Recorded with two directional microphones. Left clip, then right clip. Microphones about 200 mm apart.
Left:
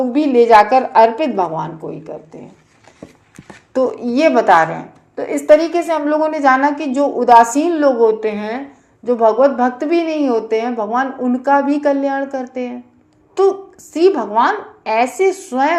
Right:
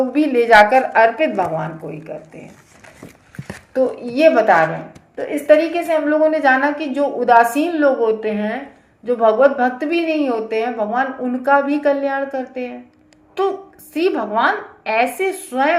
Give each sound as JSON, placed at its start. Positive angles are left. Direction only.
{"t": 0.1, "sound": "a woman's voice", "side_deg": 35}
{"t": 3.7, "sound": "a woman's voice", "side_deg": 30}
{"t": 13.9, "sound": "a woman's voice", "side_deg": 30}